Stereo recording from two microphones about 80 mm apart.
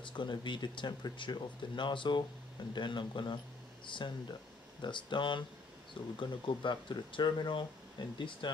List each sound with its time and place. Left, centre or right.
0.0 s speech: left